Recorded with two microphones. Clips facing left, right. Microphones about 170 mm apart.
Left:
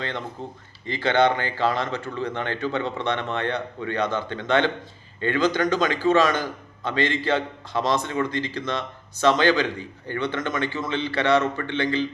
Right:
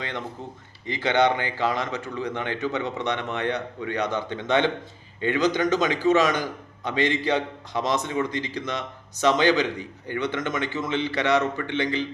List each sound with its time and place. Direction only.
0.9 s speech: 20° right (ahead or behind)